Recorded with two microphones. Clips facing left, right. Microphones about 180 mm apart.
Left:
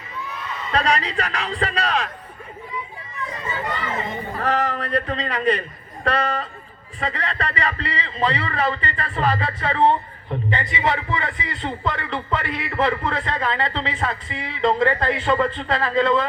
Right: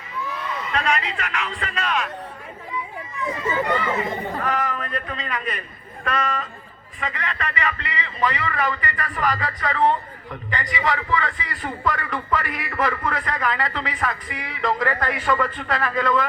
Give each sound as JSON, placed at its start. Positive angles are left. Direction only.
{"t": 0.7, "sound": "a man's voice", "side_deg": 35}
{"t": 4.4, "sound": "a man's voice", "side_deg": 35}